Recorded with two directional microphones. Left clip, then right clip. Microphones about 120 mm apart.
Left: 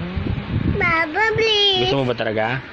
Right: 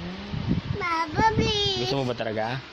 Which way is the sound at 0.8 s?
15° right (ahead or behind).